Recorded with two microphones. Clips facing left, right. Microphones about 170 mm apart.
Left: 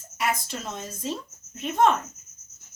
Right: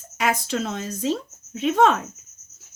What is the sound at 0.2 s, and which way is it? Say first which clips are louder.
A woman's voice: right 5 dB; 90° right.